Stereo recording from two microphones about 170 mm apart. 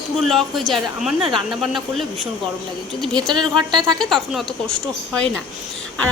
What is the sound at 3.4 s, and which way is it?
Speech, 25° right (ahead or behind).